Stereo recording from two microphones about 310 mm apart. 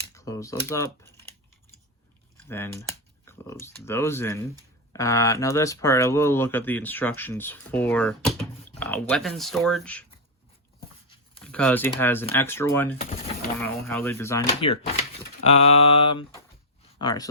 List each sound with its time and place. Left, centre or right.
0.1 s speech: centre
2.5 s speech: centre
11.4 s speech: centre
13.0 s mantra: left
13.6 s speech: centre
15.4 s mantra: left
17.0 s speech: centre